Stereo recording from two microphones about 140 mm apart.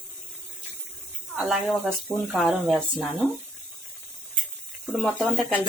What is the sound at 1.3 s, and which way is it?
Speech, 5° right (ahead or behind).